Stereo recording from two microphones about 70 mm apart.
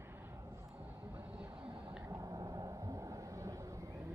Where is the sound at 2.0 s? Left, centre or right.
Right.